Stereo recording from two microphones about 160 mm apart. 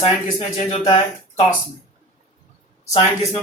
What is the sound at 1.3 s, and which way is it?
Speech, 35° left (ahead or behind).